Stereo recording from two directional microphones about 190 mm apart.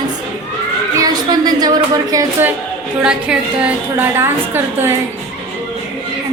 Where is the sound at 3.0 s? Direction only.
5° right (ahead or behind).